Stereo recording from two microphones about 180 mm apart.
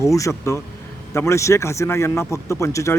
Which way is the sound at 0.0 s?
15° left (ahead or behind).